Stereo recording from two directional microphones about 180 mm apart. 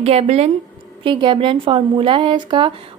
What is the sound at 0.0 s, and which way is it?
A woman's voice, 35° right (ahead or behind).